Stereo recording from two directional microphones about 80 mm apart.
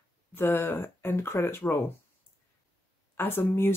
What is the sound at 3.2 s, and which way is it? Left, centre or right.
Speech, left.